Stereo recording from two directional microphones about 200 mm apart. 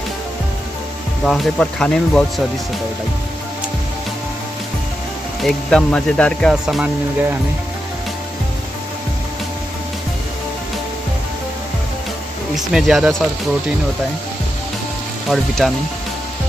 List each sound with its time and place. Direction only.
1.2 s speech: centre (ahead or behind)
5.4 s speech: 5° left (ahead or behind)
12.5 s speech: centre (ahead or behind)
15.2 s speech: centre (ahead or behind)